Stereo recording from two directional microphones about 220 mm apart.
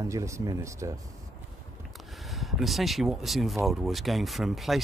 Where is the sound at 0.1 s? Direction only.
15° right (ahead or behind).